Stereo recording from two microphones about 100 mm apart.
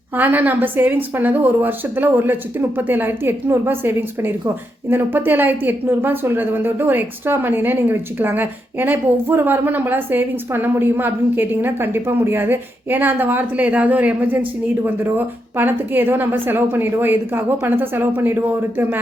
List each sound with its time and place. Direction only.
0.2 s a woman's voice: 20° right (ahead or behind)